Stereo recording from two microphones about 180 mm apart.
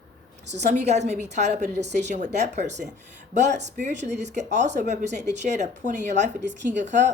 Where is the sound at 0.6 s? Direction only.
40° right (ahead or behind).